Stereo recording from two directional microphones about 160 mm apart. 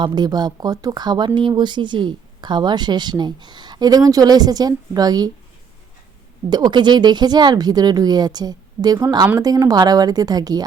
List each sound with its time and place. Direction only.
0.0 s speech: 25° right (ahead or behind)
6.5 s speech: 30° right (ahead or behind)